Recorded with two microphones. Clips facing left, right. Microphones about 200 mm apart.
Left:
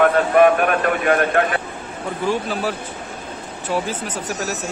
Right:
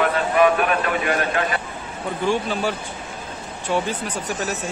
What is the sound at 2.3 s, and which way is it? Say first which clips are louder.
Speech: even; centre (ahead or behind).